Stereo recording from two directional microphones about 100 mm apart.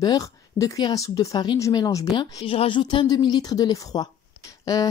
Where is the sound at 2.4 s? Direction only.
70° left (ahead or behind).